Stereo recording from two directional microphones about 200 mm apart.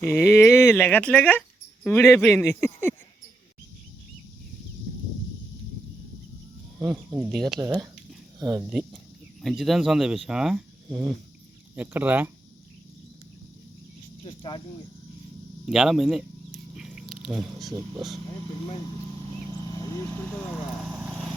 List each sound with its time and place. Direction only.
0.0 s speech: 10° left (ahead or behind)
6.7 s speech: 10° right (ahead or behind)
7.6 s speech: 15° right (ahead or behind)
9.4 s speech: centre (ahead or behind)
14.3 s speech: 25° left (ahead or behind)
15.6 s speech: centre (ahead or behind)
16.7 s a sound: centre (ahead or behind)
17.7 s speech: 5° right (ahead or behind)
19.5 s speech: 15° left (ahead or behind)
20.7 s vehicle: 5° right (ahead or behind)